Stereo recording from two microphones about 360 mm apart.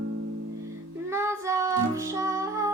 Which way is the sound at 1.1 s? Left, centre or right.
Centre.